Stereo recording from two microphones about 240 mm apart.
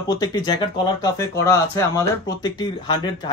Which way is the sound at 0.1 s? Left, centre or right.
Centre.